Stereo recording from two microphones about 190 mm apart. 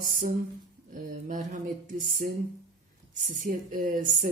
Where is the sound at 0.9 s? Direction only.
40° right (ahead or behind).